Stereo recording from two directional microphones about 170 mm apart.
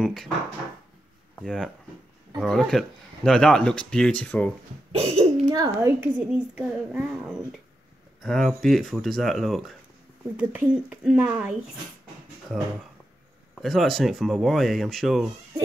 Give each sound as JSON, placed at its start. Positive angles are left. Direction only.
{"t": 0.0, "sound": "speech", "side_deg": 0}
{"t": 1.4, "sound": "speech", "side_deg": 5}
{"t": 5.0, "sound": "a sound", "side_deg": -40}
{"t": 5.5, "sound": "speech", "side_deg": -20}
{"t": 6.3, "sound": "speech", "side_deg": -5}
{"t": 13.6, "sound": "speech", "side_deg": 0}